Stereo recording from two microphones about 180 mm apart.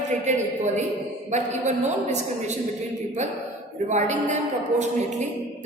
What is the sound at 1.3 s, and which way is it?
Speech, 40° right (ahead or behind).